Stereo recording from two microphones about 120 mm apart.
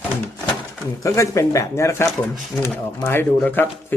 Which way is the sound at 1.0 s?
25° left (ahead or behind).